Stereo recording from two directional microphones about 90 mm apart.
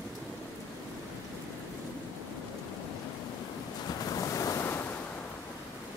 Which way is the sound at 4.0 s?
40° left (ahead or behind).